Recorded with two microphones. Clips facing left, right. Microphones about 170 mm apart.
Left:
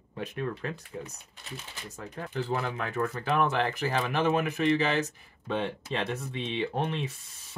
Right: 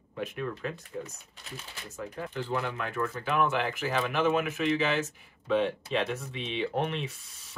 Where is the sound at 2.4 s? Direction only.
45° left (ahead or behind).